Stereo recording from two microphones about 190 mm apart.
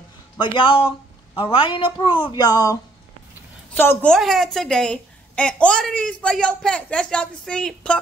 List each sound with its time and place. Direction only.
0.4 s a woman's voice: 25° left (ahead or behind); by 8.0 s 5° left (ahead or behind)